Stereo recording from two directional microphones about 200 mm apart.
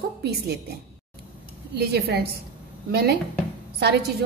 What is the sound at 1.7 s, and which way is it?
A woman's voice, 50° right (ahead or behind).